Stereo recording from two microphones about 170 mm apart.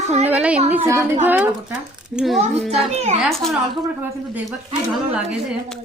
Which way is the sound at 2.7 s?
40° right (ahead or behind).